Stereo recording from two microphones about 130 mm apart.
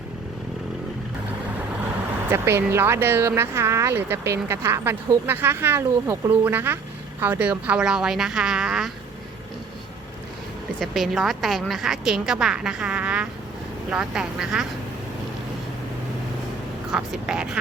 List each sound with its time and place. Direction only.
2.3 s a woman's voice: 20° right (ahead or behind)
10.8 s a woman's voice: centre (ahead or behind)
16.9 s a woman's voice: 5° right (ahead or behind)